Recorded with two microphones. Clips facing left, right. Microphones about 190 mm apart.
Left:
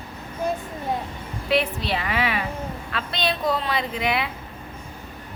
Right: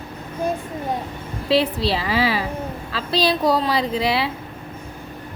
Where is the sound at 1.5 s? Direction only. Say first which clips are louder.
Right 4 dB; 30° right (ahead or behind).